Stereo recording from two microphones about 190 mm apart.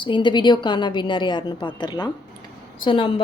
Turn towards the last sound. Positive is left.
turn(degrees=25)  # may be behind; listen again after turning